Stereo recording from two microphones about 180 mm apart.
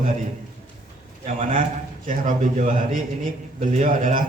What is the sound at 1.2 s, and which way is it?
A man's voice, 40° right (ahead or behind).